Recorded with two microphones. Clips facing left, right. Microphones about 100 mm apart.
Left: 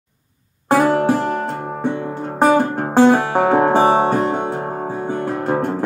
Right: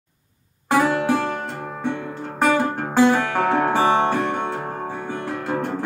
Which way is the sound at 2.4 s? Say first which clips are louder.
Left 5 dB; 40° left (ahead or behind).